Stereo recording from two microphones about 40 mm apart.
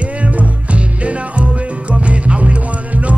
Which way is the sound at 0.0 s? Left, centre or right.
Right.